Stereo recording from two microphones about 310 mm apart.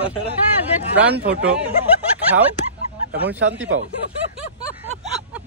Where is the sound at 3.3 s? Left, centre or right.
Right.